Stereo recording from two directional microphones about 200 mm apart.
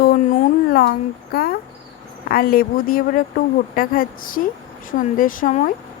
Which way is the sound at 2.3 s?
45° left (ahead or behind).